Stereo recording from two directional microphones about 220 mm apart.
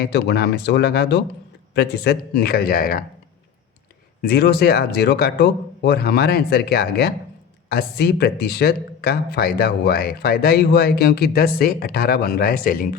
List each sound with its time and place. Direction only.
0.0 s speech: 50° left (ahead or behind)
4.2 s speech: 45° left (ahead or behind)